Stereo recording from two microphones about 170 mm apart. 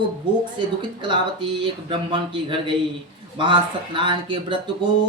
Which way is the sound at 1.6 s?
30° right (ahead or behind).